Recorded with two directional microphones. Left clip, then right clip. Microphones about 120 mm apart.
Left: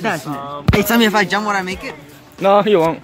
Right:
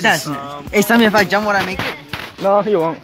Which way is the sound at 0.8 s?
45° right (ahead or behind).